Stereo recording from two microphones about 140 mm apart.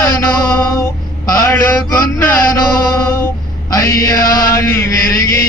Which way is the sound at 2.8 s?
20° left (ahead or behind).